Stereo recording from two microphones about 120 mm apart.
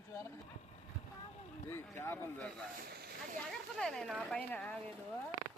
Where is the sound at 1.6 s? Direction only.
20° left (ahead or behind).